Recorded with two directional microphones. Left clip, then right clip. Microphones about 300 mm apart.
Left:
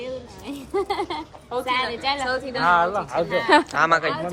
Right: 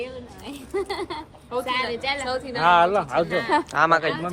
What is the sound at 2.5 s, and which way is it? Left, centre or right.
Speech, right.